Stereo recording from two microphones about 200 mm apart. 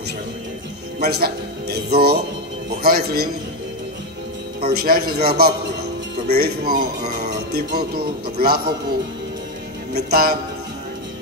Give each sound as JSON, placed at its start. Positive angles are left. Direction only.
{"t": 1.0, "sound": "speech", "side_deg": -50}
{"t": 4.6, "sound": "speech", "side_deg": -50}
{"t": 9.9, "sound": "speech", "side_deg": -50}